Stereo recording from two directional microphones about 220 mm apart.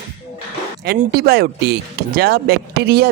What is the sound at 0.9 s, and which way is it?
Speech, 45° right (ahead or behind).